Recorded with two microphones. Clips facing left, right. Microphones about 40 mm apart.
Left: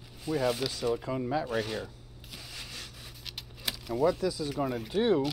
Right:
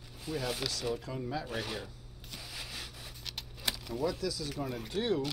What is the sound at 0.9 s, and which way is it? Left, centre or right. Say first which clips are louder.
Speech: left 6 dB; centre.